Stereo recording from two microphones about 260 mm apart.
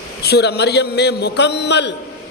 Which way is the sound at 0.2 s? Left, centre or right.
Left.